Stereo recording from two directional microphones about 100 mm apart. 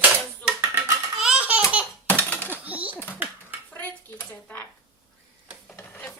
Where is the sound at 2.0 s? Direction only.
15° left (ahead or behind).